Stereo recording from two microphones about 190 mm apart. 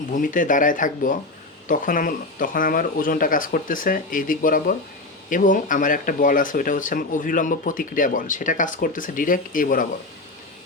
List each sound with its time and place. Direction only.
0.1 s speech: 45° left (ahead or behind)